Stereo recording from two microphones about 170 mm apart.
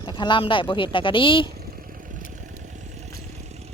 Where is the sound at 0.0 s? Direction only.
25° left (ahead or behind).